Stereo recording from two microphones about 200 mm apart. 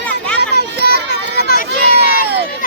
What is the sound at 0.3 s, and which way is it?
Children playing, 55° right (ahead or behind).